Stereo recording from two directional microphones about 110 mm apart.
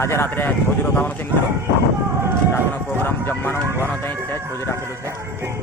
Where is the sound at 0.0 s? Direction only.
25° left (ahead or behind).